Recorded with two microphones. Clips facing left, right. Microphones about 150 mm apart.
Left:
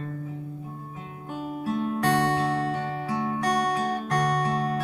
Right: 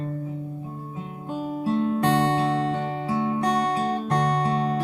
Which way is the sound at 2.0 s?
25° right (ahead or behind).